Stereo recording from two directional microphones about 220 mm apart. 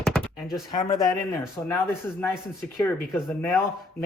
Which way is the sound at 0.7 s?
15° left (ahead or behind).